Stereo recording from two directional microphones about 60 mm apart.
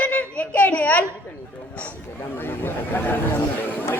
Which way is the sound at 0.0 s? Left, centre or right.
Left.